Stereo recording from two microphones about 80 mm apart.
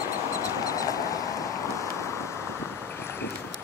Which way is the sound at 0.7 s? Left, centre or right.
Left.